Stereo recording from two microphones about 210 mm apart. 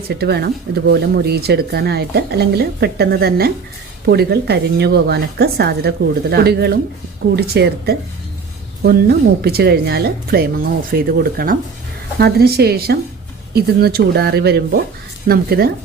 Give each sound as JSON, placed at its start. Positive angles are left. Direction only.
{"t": 0.1, "sound": "speech", "side_deg": -50}